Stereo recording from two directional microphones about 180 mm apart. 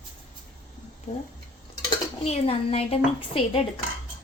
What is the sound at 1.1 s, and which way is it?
Speech, 35° left (ahead or behind).